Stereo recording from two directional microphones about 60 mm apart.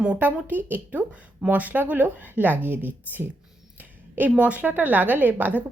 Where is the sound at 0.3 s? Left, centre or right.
Right.